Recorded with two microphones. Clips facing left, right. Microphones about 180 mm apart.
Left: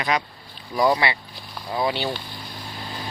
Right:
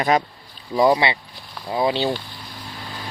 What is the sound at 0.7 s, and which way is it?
Speech, 25° right (ahead or behind).